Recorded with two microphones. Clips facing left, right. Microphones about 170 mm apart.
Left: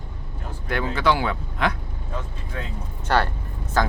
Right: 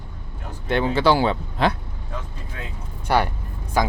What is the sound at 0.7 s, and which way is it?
Speech, 25° right (ahead or behind).